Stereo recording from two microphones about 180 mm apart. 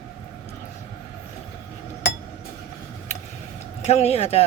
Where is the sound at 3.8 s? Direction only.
35° left (ahead or behind).